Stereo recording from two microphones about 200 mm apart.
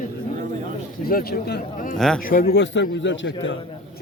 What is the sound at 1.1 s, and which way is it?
Speech, 50° left (ahead or behind).